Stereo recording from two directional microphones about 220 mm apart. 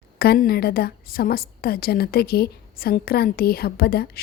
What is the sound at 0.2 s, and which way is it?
A woman's voice, 45° left (ahead or behind).